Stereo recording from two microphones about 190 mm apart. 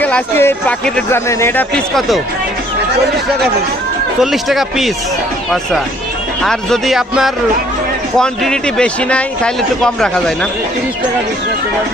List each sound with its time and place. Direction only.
0.0 s speech: 10° left (ahead or behind)
4.2 s a man's voice: centre (ahead or behind)
6.4 s a man's voice: centre (ahead or behind)